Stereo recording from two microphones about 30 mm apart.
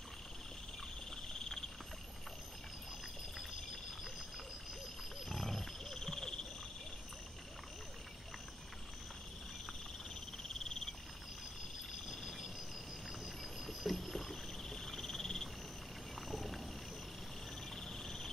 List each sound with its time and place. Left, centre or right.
5.3 s roaring cats: centre
5.9 s a sound: centre
10.6 s frog: left
12.2 s a sound: centre
13.7 s rowboat: centre
16.3 s wild animals: centre
17.8 s cricket: centre